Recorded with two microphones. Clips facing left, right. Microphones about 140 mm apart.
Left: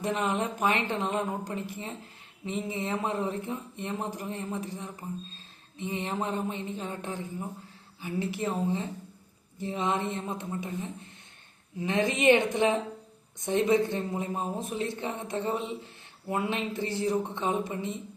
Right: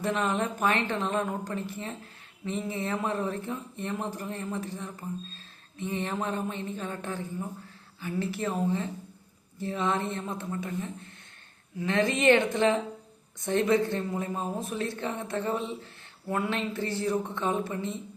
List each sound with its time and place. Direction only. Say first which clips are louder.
0.0 s speech: right 1 dB; 15° left (ahead or behind)